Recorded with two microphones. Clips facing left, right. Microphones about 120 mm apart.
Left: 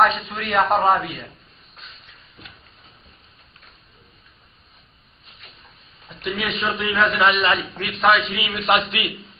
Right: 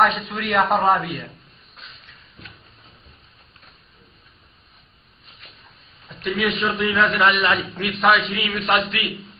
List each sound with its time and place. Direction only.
0.0 s a man's voice: centre (ahead or behind)
6.2 s a man's voice: 5° left (ahead or behind)
8.6 s a man's voice: 15° left (ahead or behind)